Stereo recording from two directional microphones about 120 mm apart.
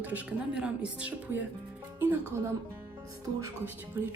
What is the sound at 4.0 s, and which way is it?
Speech, 15° right (ahead or behind).